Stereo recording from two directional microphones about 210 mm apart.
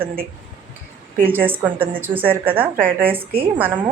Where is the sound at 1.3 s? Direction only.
10° right (ahead or behind).